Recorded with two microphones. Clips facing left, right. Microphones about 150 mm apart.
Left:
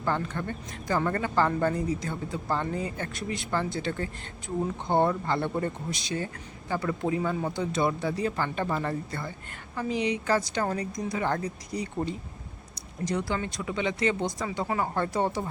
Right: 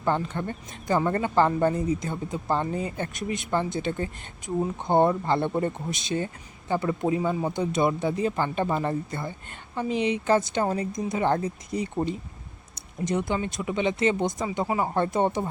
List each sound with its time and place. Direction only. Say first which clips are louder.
0.0 s speech: right 3 dB; 20° right (ahead or behind)